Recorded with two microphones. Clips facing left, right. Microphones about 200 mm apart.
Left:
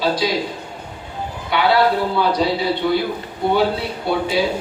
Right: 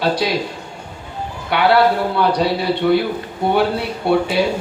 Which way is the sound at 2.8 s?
55° right (ahead or behind).